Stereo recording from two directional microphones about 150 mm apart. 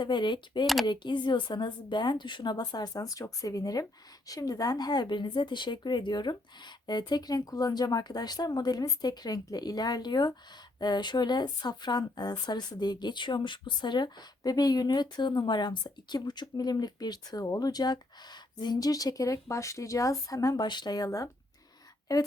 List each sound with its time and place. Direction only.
0.0 s speech: 30° left (ahead or behind)